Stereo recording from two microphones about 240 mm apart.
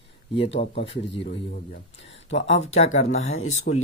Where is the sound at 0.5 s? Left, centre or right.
Left.